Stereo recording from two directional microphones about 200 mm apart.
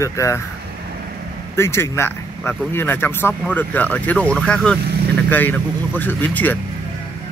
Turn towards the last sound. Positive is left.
turn(degrees=10)  # may be behind; listen again after turning